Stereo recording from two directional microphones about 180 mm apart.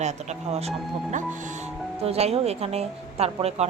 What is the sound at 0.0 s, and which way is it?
Speech, 35° right (ahead or behind).